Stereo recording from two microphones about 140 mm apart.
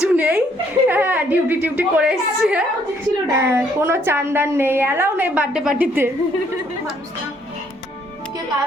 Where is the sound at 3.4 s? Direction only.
20° right (ahead or behind).